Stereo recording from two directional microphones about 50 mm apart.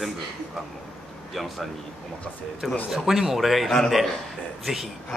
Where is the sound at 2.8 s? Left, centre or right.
Centre.